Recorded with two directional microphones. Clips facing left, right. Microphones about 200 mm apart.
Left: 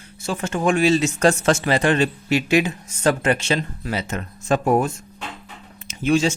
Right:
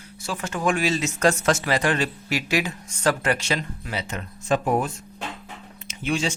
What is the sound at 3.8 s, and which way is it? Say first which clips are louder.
Speech: left 5 dB; 45° left (ahead or behind).